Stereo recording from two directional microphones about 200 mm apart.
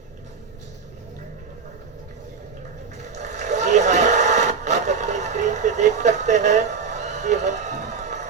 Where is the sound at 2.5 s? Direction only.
35° right (ahead or behind).